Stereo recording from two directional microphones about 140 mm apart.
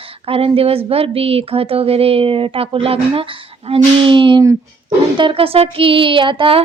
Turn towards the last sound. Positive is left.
turn(degrees=-40)  # may be behind; listen again after turning